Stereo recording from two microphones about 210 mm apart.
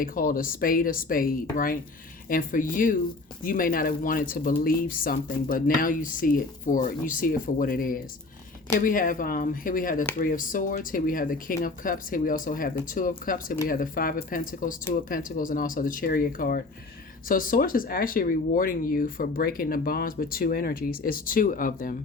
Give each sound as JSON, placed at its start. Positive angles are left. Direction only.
{"t": 0.0, "sound": "speech", "side_deg": 40}